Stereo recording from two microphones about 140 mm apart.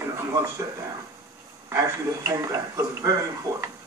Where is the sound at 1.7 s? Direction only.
25° right (ahead or behind).